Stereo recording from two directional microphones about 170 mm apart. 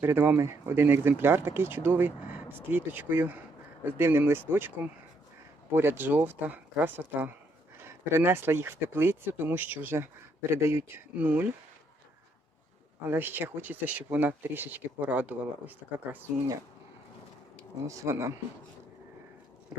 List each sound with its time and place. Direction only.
0.0 s speech: 15° right (ahead or behind)
5.7 s speech: 15° right (ahead or behind)
13.1 s speech: 10° right (ahead or behind)
17.8 s speech: 20° right (ahead or behind)